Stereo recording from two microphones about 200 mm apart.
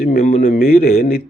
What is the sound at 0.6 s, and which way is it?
Speech, 50° left (ahead or behind).